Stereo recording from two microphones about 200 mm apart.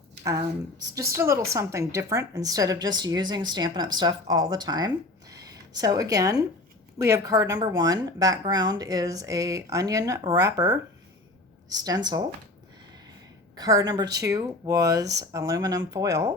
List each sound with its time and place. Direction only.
0.9 s a woman's voice: 15° right (ahead or behind)
5.3 s a sound: 20° right (ahead or behind)
7.0 s a woman's voice: 15° right (ahead or behind)
13.6 s speech: 20° right (ahead or behind)